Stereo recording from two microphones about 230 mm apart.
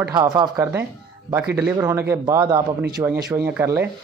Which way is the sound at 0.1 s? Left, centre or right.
Centre.